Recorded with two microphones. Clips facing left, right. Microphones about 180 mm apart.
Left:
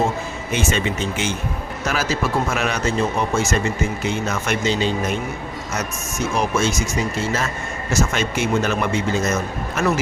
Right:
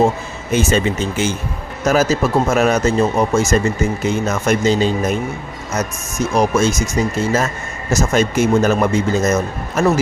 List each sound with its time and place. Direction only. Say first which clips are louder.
0.5 s speech: right 6 dB; 40° right (ahead or behind)
6.3 s speech: right 6 dB; 40° right (ahead or behind)